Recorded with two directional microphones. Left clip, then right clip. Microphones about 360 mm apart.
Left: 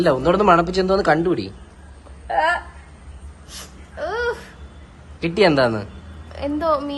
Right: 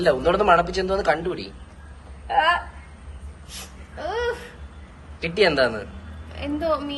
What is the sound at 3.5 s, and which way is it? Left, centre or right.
Babbling, centre.